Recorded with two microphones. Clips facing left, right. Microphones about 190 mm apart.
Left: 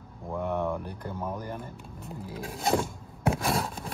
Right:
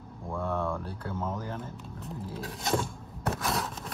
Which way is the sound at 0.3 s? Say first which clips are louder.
Left 2 dB; 15° left (ahead or behind).